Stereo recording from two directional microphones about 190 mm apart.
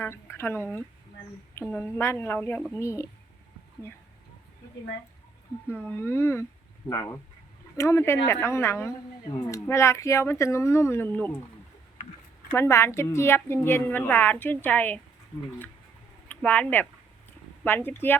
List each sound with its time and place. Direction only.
0.0 s a woman's voice: 15° left (ahead or behind)
1.6 s a woman's voice: 5° left (ahead or behind)
1.9 s a woman's voice: 15° left (ahead or behind)
5.8 s a woman's voice: 10° left (ahead or behind)
12.5 s a woman's voice: 15° left (ahead or behind)
16.3 s a woman's voice: 10° left (ahead or behind)